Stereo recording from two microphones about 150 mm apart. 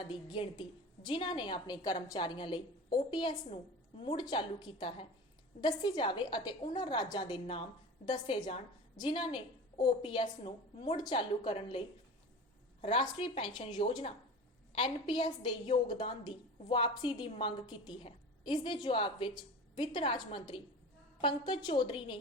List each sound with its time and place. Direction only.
0.0 s a woman's voice: 35° left (ahead or behind)
12.8 s a woman's voice: 35° left (ahead or behind)